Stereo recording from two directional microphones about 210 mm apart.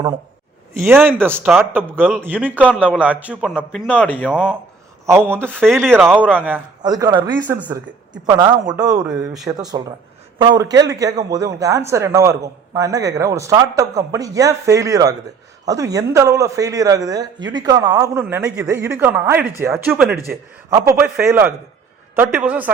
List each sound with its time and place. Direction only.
0.7 s a man's voice: 5° right (ahead or behind)
4.3 s a man's voice: 5° right (ahead or behind)
5.6 s a man's voice: centre (ahead or behind)
6.8 s speech: 20° right (ahead or behind)
9.0 s a man's voice: centre (ahead or behind)
9.5 s speech: 20° right (ahead or behind)